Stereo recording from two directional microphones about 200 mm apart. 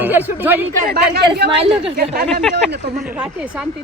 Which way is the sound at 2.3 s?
Centre (ahead or behind).